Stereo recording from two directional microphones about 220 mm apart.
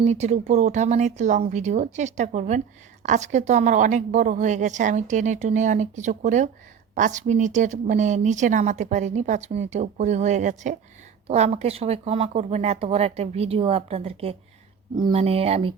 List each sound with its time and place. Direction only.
0.0 s a woman's voice: 30° right (ahead or behind)